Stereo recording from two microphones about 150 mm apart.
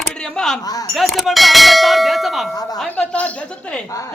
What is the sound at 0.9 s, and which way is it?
Clang, centre (ahead or behind).